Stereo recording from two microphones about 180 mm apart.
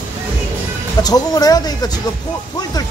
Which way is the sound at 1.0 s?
20° left (ahead or behind).